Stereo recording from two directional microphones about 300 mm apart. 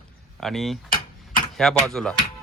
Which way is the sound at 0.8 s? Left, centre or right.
Left.